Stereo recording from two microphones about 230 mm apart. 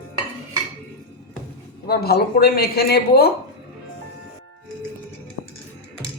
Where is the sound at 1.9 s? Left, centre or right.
Left.